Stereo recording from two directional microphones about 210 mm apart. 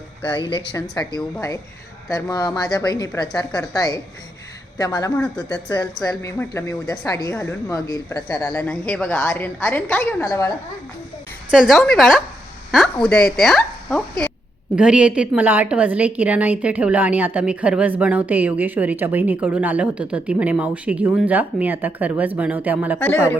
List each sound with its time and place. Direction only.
0.5 s a woman's voice: 20° left (ahead or behind)
11.5 s a woman's voice: centre (ahead or behind)
23.0 s a woman's voice: 10° left (ahead or behind)